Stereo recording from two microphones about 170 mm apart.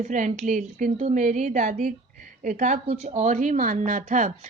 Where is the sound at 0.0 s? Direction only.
45° right (ahead or behind).